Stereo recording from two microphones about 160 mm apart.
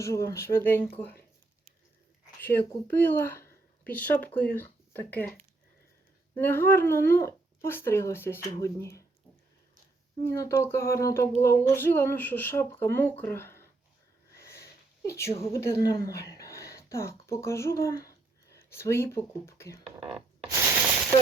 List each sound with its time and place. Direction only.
0.0 s speech: 20° left (ahead or behind)
2.4 s speech: 15° left (ahead or behind)
6.3 s speech: 15° left (ahead or behind)
10.2 s speech: 20° left (ahead or behind)
14.3 s sniff: 20° left (ahead or behind)
15.5 s speech: 20° left (ahead or behind)
20.5 s a sound: 15° right (ahead or behind)